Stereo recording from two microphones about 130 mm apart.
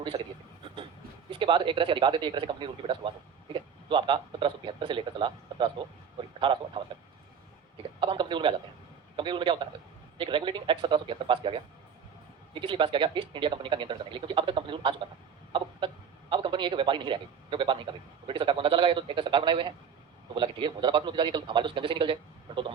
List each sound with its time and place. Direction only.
0.1 s a man's voice: 55° right (ahead or behind)
1.3 s a man's voice: 40° right (ahead or behind)
15.5 s chicken: 40° right (ahead or behind)
16.3 s a man's voice: 40° right (ahead or behind)